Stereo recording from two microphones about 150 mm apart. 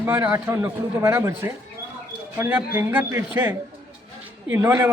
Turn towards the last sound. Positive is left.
turn(degrees=-15)  # may be behind; listen again after turning